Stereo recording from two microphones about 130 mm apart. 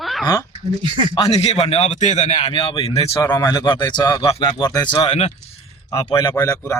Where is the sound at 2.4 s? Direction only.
45° left (ahead or behind).